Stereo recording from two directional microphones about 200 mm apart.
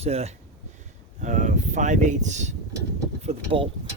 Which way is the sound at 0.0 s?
30° right (ahead or behind).